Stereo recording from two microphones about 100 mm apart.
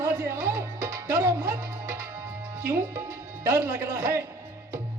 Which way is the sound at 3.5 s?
30° right (ahead or behind).